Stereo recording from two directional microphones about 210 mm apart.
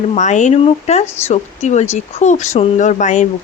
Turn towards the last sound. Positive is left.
turn(degrees=35)  # may be behind; listen again after turning